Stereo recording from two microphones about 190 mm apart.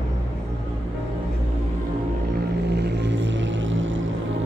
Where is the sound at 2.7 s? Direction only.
65° right (ahead or behind); by 3.9 s 85° right.